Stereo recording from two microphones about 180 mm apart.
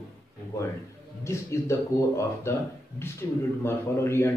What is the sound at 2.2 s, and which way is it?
A man's voice, 15° left (ahead or behind).